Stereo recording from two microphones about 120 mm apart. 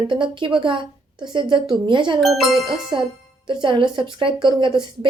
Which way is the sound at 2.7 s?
45° right (ahead or behind).